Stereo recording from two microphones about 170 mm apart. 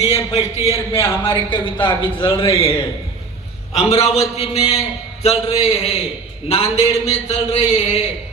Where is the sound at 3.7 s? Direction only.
40° left (ahead or behind).